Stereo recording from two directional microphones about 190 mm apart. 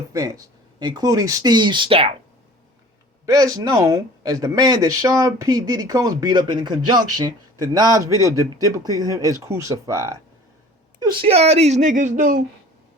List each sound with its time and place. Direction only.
0.1 s speech: 15° right (ahead or behind)
3.2 s speech: 20° right (ahead or behind); by 12.4 s 45° right (ahead or behind)